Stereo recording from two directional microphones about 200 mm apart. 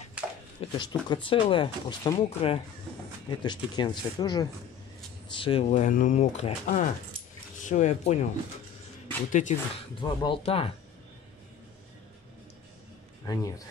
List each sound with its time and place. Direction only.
0.2 s a sound: 5° right (ahead or behind)
0.6 s speech: 20° left (ahead or behind)
9.3 s speech: 40° left (ahead or behind)
9.9 s speech: 25° left (ahead or behind)
13.2 s a man's voice: 15° left (ahead or behind)